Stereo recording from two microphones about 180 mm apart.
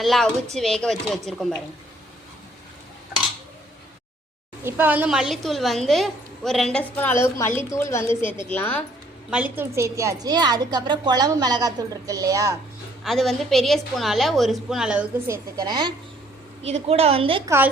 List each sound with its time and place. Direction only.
0.0 s a woman's voice: centre (ahead or behind)
4.6 s a woman's voice: 10° right (ahead or behind); by 8.8 s 10° left (ahead or behind)
9.3 s a woman's voice: 10° right (ahead or behind)
13.1 s a woman's voice: centre (ahead or behind)
15.3 s a woman's voice: 20° right (ahead or behind)
16.9 s a woman's voice: 35° right (ahead or behind)